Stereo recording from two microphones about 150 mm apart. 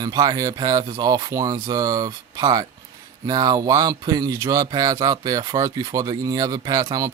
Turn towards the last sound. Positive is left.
turn(degrees=-25)  # may be behind; listen again after turning